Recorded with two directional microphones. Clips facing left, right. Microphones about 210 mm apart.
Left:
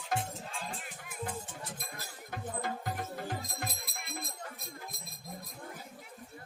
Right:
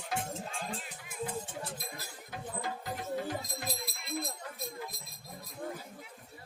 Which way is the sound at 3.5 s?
50° left (ahead or behind).